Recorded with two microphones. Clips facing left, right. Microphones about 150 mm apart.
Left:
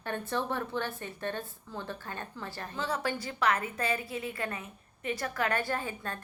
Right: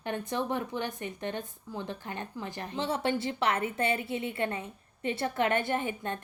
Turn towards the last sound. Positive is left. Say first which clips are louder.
# right 4 dB
turn(degrees=-20)  # may be behind; listen again after turning